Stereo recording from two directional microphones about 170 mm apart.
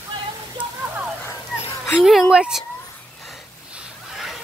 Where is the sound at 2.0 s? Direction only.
Centre (ahead or behind).